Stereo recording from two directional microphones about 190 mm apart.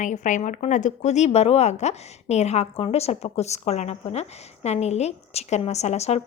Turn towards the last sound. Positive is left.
turn(degrees=35)  # may be behind; listen again after turning